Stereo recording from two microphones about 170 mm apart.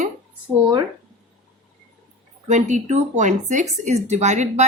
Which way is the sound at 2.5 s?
45° right (ahead or behind).